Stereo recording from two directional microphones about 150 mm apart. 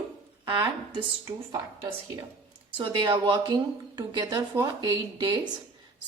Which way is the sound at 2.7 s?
30° right (ahead or behind).